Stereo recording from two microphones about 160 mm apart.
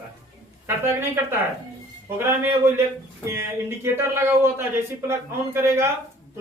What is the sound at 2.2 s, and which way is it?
A man's voice, 15° right (ahead or behind).